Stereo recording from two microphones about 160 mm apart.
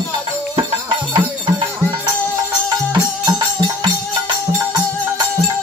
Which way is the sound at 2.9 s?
25° right (ahead or behind).